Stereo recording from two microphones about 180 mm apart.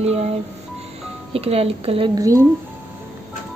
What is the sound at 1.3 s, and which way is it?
Speech, 35° right (ahead or behind).